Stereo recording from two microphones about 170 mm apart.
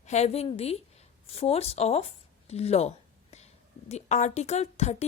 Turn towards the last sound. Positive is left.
turn(degrees=40)  # may be behind; listen again after turning